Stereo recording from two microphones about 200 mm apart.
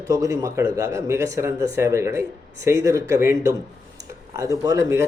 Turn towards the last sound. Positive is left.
turn(degrees=-15)  # may be behind; listen again after turning